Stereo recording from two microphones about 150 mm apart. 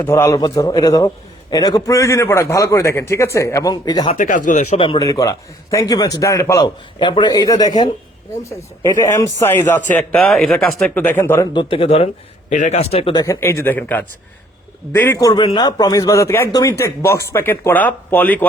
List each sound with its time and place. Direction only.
0.0 s a man's voice: 15° left (ahead or behind)
4.2 s speech: 60° left (ahead or behind)
4.9 s a man's voice: 25° left (ahead or behind); by 10.9 s centre (ahead or behind)
10.9 s speech: 15° left (ahead or behind)
11.5 s speech: 35° left (ahead or behind)
12.5 s a man's voice: 55° left (ahead or behind)
13.1 s a man's voice: 25° left (ahead or behind)